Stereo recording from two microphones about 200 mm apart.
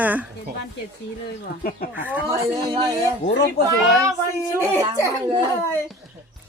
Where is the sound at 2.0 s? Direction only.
15° right (ahead or behind).